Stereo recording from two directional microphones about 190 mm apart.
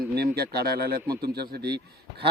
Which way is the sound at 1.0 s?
20° right (ahead or behind).